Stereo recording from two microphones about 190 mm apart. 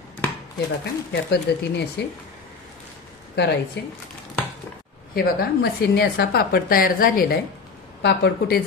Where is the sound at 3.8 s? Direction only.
65° left (ahead or behind).